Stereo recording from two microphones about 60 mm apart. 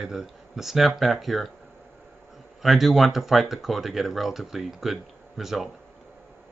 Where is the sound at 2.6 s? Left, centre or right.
Centre.